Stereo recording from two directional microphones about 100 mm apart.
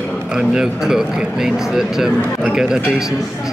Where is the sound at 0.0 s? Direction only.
15° left (ahead or behind).